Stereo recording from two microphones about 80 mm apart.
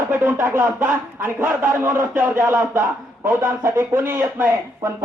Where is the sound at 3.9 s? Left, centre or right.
Right.